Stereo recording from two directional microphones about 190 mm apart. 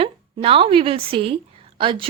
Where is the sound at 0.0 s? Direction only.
30° right (ahead or behind).